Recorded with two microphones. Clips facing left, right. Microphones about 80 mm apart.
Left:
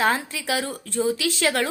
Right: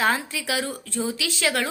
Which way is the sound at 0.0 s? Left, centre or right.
Left.